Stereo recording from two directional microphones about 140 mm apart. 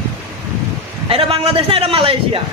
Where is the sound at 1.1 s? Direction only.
45° right (ahead or behind).